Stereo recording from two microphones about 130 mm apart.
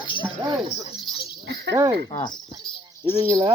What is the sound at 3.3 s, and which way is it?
Speech, 30° right (ahead or behind).